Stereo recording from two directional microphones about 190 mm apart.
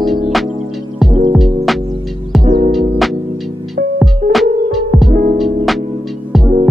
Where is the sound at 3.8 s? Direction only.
60° right (ahead or behind).